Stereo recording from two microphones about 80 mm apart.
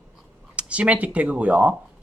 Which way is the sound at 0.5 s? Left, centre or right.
Centre.